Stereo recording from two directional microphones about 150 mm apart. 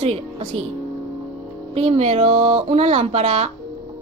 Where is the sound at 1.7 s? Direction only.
40° right (ahead or behind).